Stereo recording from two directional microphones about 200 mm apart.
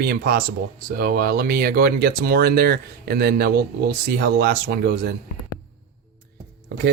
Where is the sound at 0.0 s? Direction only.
50° right (ahead or behind).